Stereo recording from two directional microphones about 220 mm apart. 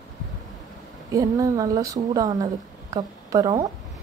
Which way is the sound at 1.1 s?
15° right (ahead or behind).